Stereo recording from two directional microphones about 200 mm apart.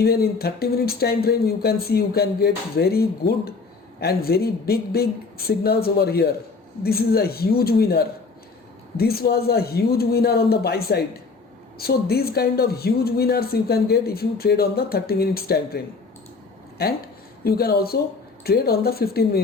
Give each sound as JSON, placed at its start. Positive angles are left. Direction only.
{"t": 0.0, "sound": "speech", "side_deg": 50}
{"t": 17.4, "sound": "speech", "side_deg": 50}